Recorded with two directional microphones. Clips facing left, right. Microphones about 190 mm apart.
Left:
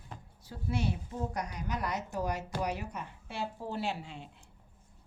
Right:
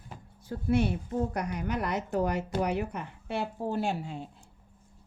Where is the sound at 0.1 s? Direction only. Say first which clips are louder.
Right 1 dB; 10° right (ahead or behind).